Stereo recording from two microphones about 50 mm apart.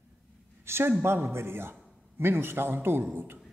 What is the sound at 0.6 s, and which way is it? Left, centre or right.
A woman's voice, right.